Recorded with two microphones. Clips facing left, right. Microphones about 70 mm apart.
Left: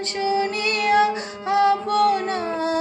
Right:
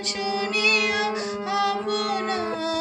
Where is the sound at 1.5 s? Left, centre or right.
Left.